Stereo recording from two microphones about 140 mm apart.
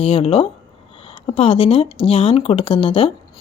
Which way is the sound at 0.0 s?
40° left (ahead or behind).